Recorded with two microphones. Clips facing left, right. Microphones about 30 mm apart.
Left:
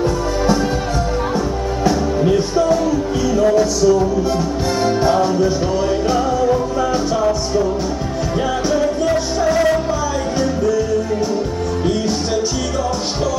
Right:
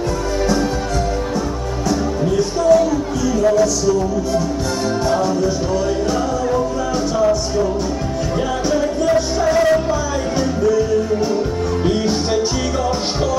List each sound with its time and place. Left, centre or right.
4.8 s music: centre
8.4 s music: centre